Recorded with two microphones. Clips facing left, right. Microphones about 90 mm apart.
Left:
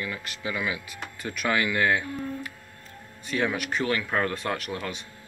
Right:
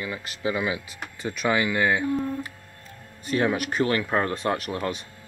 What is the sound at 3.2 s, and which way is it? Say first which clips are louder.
Speech: right 4 dB; 35° right (ahead or behind).